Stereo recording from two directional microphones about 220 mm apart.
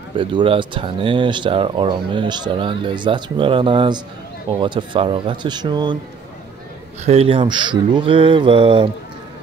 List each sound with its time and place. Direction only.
0.1 s speech: 20° right (ahead or behind)
7.1 s speech: 25° right (ahead or behind)